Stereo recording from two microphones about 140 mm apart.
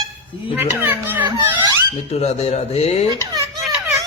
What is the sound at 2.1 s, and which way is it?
Speech, 50° left (ahead or behind).